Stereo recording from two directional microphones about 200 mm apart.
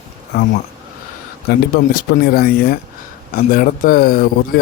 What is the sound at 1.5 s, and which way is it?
Speech, 50° left (ahead or behind).